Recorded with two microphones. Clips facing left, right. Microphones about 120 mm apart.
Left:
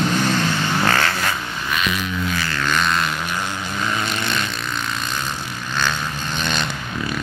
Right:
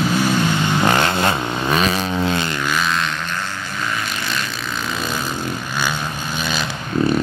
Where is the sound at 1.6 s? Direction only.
35° right (ahead or behind).